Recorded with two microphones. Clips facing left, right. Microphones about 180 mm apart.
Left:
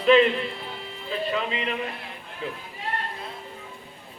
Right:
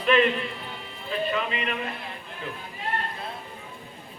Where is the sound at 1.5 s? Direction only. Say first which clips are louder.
Left 1 dB; 25° left (ahead or behind).